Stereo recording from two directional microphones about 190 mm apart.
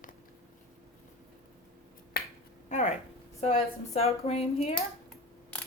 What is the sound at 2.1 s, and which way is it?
Finger snapping, 50° left (ahead or behind).